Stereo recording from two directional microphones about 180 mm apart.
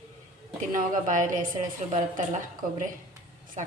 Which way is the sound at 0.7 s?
45° right (ahead or behind).